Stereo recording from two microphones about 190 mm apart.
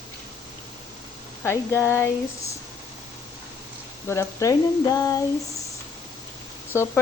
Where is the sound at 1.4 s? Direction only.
15° left (ahead or behind).